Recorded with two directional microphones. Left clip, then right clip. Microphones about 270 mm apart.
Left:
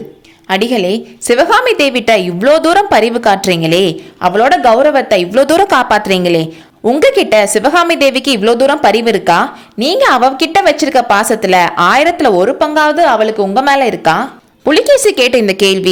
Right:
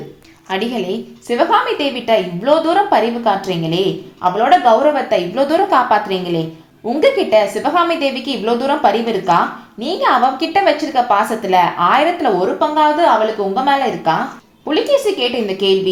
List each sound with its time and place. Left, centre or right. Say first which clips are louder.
0.4 s a woman's voice: left 8 dB; left